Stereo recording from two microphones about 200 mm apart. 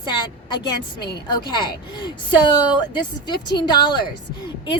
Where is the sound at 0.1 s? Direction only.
20° left (ahead or behind).